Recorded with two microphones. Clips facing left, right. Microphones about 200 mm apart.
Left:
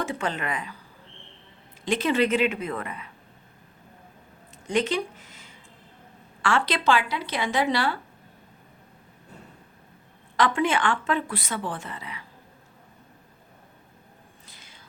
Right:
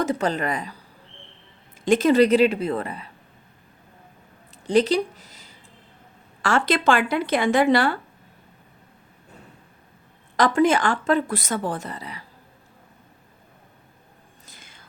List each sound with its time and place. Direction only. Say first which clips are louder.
0.0 s speech: right 6 dB; 40° right (ahead or behind)
1.8 s speech: right 7 dB; 45° right (ahead or behind)
4.6 s a sound: right 6 dB; 35° right (ahead or behind)
6.4 s speech: right 3 dB; 45° right (ahead or behind)
10.3 s speech: right 5 dB; 40° right (ahead or behind)
14.4 s a sound: right 2 dB; 50° right (ahead or behind)